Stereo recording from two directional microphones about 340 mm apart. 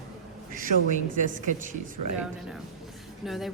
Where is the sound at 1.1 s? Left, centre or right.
Right.